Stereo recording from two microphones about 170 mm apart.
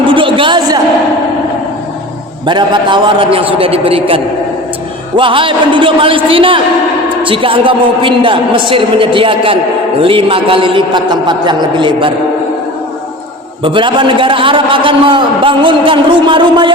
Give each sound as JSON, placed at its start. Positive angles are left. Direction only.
{"t": 0.0, "sound": "a sound", "side_deg": -30}
{"t": 2.5, "sound": "a man's voice", "side_deg": -30}
{"t": 13.7, "sound": "a man's voice", "side_deg": -30}